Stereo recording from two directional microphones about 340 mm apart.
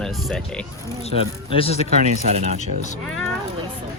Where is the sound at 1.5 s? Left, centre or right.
Centre.